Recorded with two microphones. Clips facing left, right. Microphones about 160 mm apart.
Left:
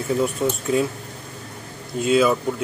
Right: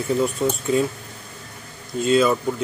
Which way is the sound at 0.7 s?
Centre (ahead or behind).